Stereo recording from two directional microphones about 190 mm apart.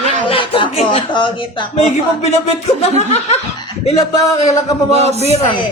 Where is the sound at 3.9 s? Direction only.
35° left (ahead or behind).